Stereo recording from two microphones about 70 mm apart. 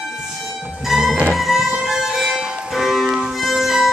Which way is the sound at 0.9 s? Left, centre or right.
Centre.